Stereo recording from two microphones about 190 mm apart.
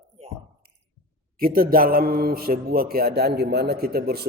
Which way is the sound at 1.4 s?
50° right (ahead or behind).